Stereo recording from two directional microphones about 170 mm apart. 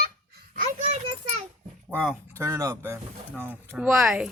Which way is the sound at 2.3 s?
15° right (ahead or behind).